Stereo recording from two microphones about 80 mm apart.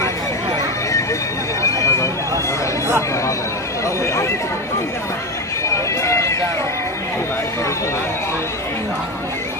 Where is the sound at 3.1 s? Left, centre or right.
Left.